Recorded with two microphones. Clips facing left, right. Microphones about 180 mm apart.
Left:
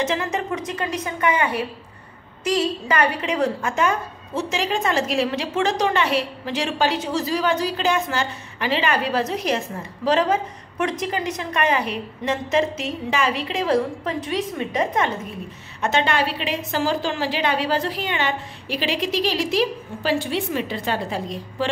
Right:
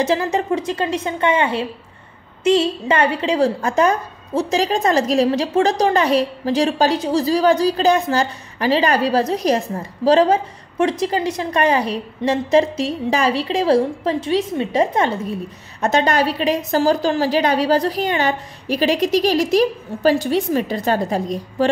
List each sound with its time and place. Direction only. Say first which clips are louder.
0.0 s a woman's voice: right 5 dB; 30° right (ahead or behind)